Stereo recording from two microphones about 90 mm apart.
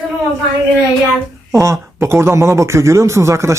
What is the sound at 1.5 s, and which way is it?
A man's voice, 30° right (ahead or behind).